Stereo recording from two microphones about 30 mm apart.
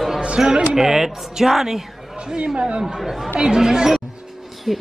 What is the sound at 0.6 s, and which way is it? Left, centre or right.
Speech, centre.